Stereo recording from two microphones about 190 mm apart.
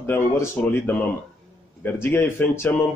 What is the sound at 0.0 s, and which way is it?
A man's voice, 10° left (ahead or behind).